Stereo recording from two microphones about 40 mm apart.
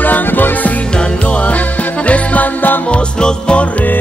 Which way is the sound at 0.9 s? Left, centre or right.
Left.